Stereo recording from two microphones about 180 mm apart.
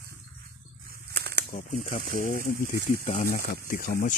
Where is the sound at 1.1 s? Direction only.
65° right (ahead or behind).